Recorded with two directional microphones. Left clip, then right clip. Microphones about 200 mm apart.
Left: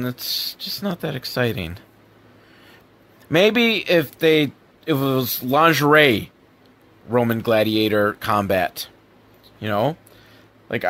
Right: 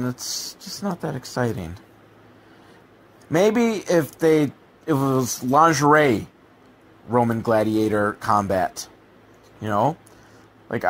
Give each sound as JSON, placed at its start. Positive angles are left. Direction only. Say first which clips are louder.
{"t": 0.0, "sound": "speech", "louder": "left 4 dB", "side_deg": 40}
{"t": 3.3, "sound": "speech", "louder": "left 3 dB", "side_deg": 35}
{"t": 9.6, "sound": "speech", "louder": "even", "side_deg": 30}